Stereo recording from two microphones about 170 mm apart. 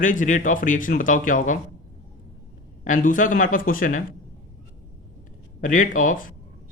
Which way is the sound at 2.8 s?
50° left (ahead or behind).